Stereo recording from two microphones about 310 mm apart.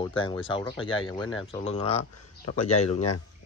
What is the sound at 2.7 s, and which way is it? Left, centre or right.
Speech, left.